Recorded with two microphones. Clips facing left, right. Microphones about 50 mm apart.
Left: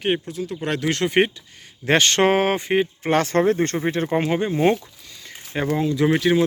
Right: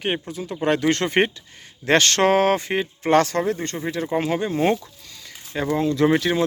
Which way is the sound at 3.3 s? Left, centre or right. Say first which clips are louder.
Left 5 dB; left.